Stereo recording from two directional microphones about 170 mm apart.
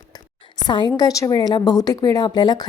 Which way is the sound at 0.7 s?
25° left (ahead or behind).